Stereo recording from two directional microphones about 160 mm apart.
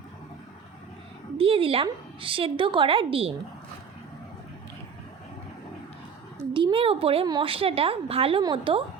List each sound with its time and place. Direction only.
1.4 s a woman's voice: 35° right (ahead or behind)
6.5 s a woman's voice: 30° right (ahead or behind)